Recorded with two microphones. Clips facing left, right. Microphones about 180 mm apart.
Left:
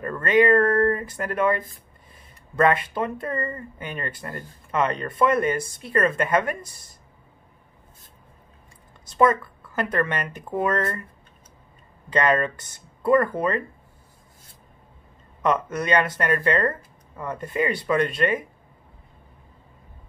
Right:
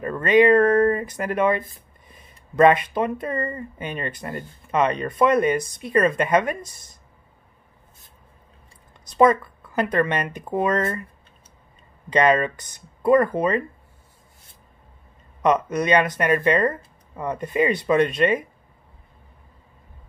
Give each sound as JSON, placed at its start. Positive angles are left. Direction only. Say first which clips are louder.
{"t": 0.0, "sound": "speech", "louder": "right 3 dB", "side_deg": -20}
{"t": 9.0, "sound": "speech", "louder": "right 3 dB", "side_deg": -20}
{"t": 12.1, "sound": "speech", "louder": "right 3 dB", "side_deg": -20}
{"t": 15.4, "sound": "speech", "louder": "right 3 dB", "side_deg": -20}